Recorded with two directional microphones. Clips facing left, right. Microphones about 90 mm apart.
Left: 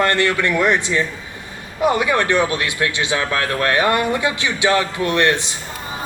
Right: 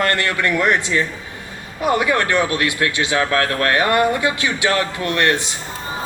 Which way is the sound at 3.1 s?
35° right (ahead or behind).